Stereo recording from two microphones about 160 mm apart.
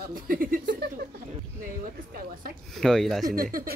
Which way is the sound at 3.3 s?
60° right (ahead or behind).